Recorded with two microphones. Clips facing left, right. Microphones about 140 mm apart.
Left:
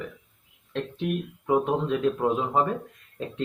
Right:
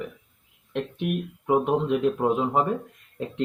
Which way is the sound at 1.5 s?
Centre (ahead or behind).